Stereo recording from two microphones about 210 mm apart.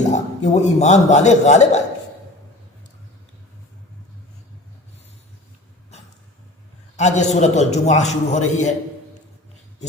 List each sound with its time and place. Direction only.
0.0 s a man's voice: 35° left (ahead or behind)
6.9 s a man's voice: 35° left (ahead or behind)